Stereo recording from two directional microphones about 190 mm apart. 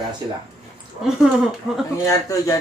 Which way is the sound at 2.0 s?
15° left (ahead or behind).